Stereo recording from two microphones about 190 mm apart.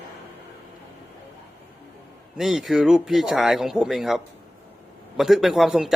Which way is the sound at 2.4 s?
Centre (ahead or behind).